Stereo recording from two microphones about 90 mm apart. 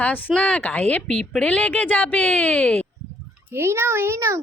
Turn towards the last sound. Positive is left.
turn(degrees=-30)  # may be behind; listen again after turning